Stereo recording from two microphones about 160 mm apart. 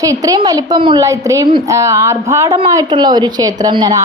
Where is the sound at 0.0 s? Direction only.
20° right (ahead or behind).